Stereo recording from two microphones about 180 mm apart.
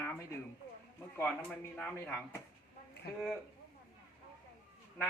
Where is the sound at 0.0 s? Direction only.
15° left (ahead or behind).